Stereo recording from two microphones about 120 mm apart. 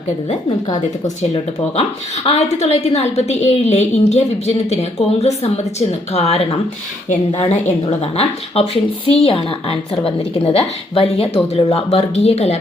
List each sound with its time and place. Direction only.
2.2 s a woman's voice: 60° left (ahead or behind)